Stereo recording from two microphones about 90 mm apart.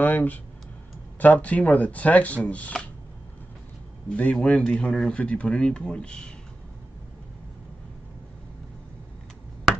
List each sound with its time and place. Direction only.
0.0 s speech: 20° left (ahead or behind)
4.1 s speech: 15° left (ahead or behind)